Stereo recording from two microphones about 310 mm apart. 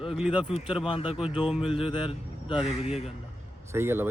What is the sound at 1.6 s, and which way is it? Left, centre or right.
Speech, centre.